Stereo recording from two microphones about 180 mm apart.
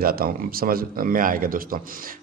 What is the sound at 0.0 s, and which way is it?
A man's voice, 55° right (ahead or behind).